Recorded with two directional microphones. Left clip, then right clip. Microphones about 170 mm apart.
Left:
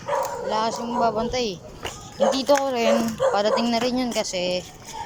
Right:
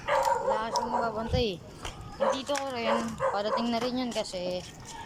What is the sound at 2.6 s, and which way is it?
A child's voice, 20° left (ahead or behind).